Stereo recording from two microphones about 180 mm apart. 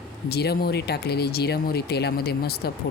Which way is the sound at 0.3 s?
60° left (ahead or behind).